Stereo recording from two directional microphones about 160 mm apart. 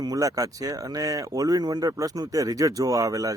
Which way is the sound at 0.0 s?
20° right (ahead or behind).